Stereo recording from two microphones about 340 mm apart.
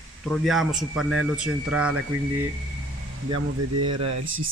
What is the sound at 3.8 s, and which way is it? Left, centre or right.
Speech, centre.